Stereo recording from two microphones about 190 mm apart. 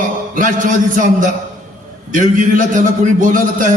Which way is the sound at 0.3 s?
45° right (ahead or behind).